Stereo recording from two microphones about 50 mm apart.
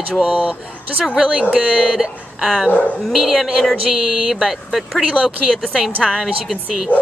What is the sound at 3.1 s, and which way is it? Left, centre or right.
Speech, centre.